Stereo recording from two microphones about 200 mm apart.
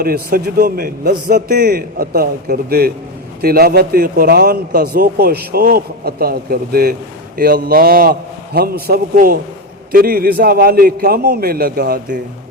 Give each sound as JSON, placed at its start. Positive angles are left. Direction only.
{"t": 0.0, "sound": "a man's voice", "side_deg": -50}